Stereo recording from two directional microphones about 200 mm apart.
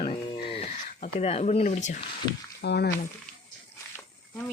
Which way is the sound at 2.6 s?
55° left (ahead or behind).